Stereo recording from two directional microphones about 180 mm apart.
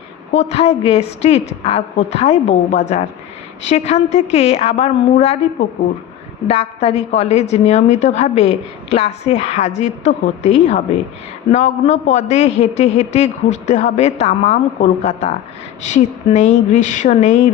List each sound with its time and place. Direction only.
0.3 s a woman's voice: 40° left (ahead or behind)
6.5 s a woman's voice: 35° left (ahead or behind)